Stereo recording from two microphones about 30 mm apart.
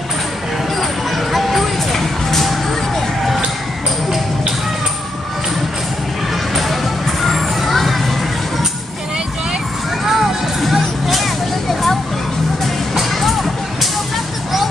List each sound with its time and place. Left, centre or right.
0.7 s a sound: centre
2.0 s music: centre
6.5 s music: centre
10.0 s music: centre
13.1 s music: centre